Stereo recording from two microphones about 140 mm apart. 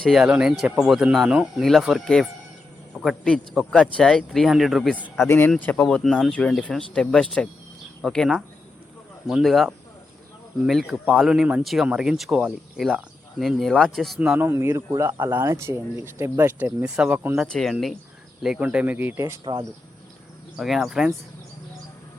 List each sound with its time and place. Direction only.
0.0 s speech: centre (ahead or behind)
5.5 s speech: 10° left (ahead or behind)
14.2 s speech: 10° right (ahead or behind)
17.5 s speech: centre (ahead or behind); by 19.2 s 15° right (ahead or behind)
19.5 s speech: 35° right (ahead or behind)
20.6 s speech: centre (ahead or behind)